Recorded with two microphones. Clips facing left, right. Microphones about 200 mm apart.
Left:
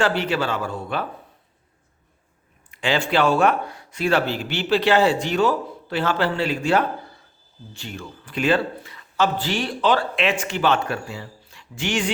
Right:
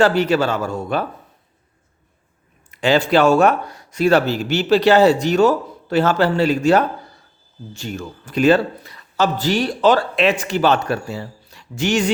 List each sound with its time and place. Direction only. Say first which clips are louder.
0.0 s speech: right 6 dB; 40° right (ahead or behind)
2.6 s speech: right 6 dB; 40° right (ahead or behind)